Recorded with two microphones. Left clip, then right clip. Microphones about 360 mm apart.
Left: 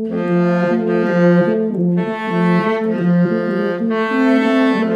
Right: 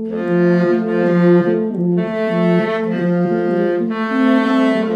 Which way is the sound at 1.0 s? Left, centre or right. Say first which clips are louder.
Right 1 dB; left.